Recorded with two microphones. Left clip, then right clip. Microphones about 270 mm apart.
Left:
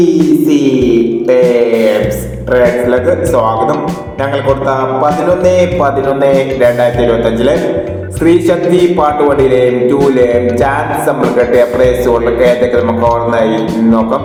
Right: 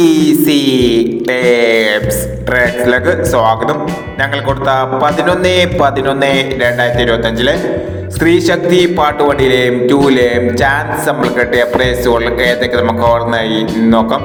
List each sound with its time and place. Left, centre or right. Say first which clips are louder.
1.3 s music: left 2 dB; right
5.8 s music: left 1 dB; right
8.2 s music: left 1 dB; right
11.3 s speech: left 4 dB; right